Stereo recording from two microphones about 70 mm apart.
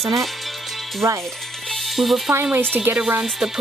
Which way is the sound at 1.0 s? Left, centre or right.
Right.